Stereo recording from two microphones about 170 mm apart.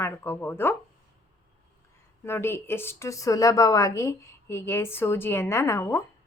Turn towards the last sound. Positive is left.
turn(degrees=15)  # may be behind; listen again after turning